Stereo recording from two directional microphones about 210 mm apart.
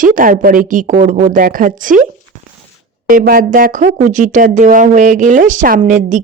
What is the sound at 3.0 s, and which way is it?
Speech, 40° right (ahead or behind).